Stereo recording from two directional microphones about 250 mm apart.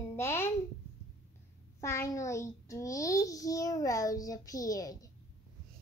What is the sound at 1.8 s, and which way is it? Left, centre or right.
A child's voice, centre.